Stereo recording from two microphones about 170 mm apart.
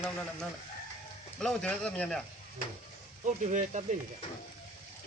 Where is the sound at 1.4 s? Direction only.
5° left (ahead or behind).